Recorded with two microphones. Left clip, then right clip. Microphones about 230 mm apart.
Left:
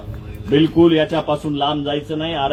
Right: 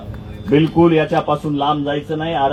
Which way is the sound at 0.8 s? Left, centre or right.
Centre.